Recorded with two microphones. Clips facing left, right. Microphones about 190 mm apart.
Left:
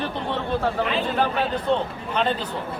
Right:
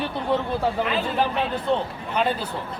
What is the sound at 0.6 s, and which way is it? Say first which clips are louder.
Speech: even; centre (ahead or behind).